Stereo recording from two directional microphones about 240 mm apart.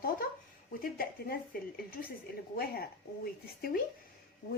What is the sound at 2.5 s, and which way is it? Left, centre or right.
Speech, left.